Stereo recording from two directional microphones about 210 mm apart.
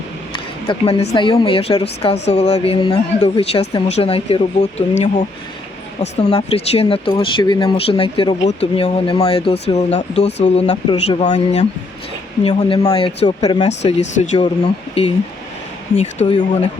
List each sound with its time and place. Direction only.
0.3 s a sound: 25° left (ahead or behind)
1.1 s speech: 25° left (ahead or behind)
12.4 s speech: 25° left (ahead or behind)